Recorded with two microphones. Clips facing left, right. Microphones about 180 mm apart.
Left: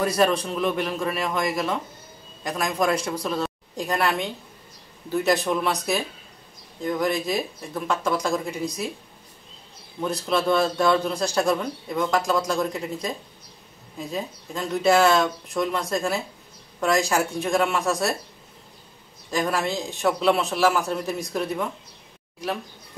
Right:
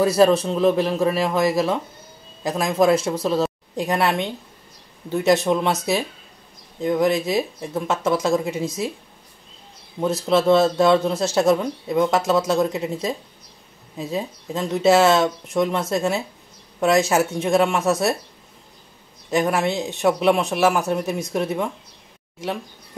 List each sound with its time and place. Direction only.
0.0 s speech: 30° right (ahead or behind)
6.8 s speech: 25° right (ahead or behind)
10.2 s speech: 25° right (ahead or behind)
19.3 s speech: 20° right (ahead or behind)